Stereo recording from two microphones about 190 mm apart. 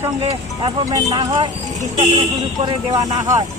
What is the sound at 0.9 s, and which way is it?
Speech, 20° right (ahead or behind).